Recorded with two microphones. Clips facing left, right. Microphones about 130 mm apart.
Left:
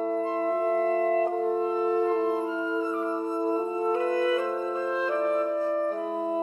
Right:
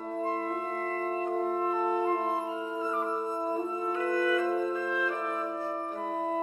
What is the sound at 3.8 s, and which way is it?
Music, 30° left (ahead or behind).